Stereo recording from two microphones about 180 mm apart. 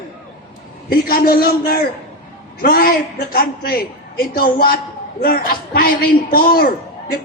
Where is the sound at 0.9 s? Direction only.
55° left (ahead or behind).